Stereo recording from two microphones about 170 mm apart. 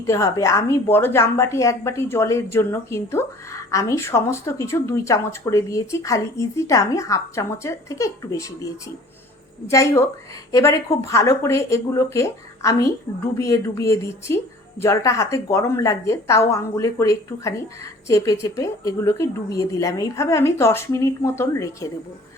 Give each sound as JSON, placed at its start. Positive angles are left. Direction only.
{"t": 0.1, "sound": "a woman's voice", "side_deg": 15}
{"t": 9.6, "sound": "a woman's voice", "side_deg": 15}